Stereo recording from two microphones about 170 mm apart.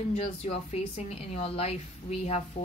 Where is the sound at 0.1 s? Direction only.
40° left (ahead or behind).